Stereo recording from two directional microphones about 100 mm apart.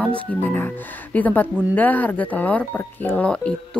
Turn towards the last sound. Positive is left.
turn(degrees=10)  # may be behind; listen again after turning